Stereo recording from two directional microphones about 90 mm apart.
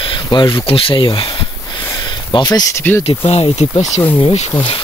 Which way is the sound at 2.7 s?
25° left (ahead or behind).